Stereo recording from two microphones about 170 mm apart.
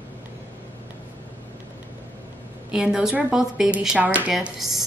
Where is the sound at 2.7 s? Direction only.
5° right (ahead or behind).